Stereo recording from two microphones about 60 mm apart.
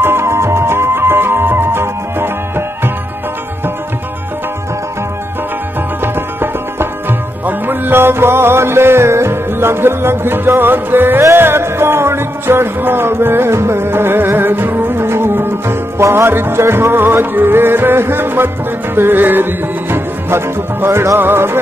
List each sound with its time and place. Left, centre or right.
0.0 s music: right
6.1 s music: right
16.3 s music: right